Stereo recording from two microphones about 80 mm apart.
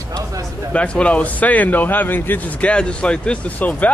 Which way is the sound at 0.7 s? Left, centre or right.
Centre.